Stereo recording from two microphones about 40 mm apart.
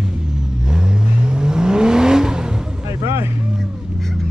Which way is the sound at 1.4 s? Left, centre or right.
Centre.